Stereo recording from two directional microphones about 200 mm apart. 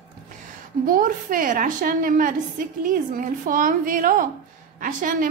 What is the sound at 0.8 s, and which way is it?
A woman's voice, 45° right (ahead or behind).